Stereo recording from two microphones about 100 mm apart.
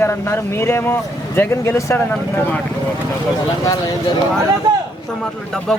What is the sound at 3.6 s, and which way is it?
Speech, 40° left (ahead or behind).